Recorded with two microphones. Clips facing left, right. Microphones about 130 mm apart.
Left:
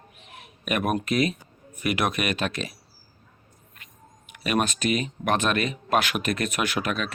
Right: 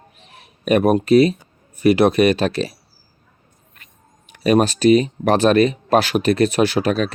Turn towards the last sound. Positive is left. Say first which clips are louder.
# right 10 dB
turn(degrees=-35)  # may be behind; listen again after turning